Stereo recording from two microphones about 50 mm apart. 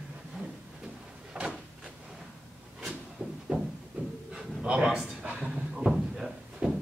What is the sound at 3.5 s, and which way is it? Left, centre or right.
Music, right.